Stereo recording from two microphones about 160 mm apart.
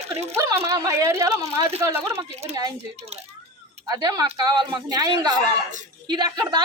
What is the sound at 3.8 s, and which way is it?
A woman's voice, 25° right (ahead or behind).